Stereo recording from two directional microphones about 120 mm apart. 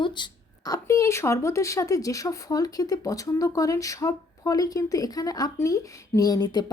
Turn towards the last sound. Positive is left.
turn(degrees=35)  # may be behind; listen again after turning